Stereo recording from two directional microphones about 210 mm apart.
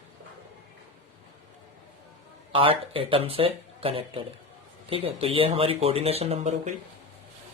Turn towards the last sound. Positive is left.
turn(degrees=-30)  # may be behind; listen again after turning